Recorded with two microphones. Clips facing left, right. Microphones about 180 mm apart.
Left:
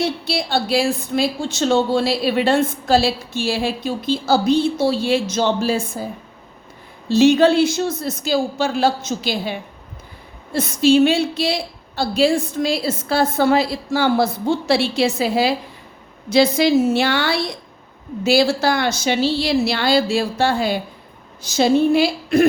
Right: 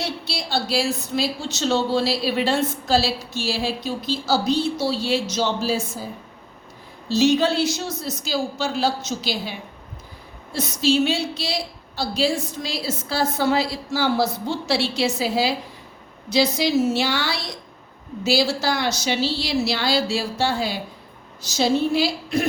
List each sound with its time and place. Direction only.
0.0 s a woman's voice: 55° left (ahead or behind)
7.1 s a woman's voice: 55° left (ahead or behind)